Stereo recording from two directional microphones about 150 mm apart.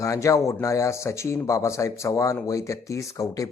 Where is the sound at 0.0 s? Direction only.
20° left (ahead or behind).